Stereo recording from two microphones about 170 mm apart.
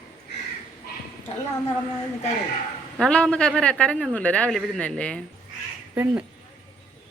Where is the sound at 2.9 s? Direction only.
5° left (ahead or behind).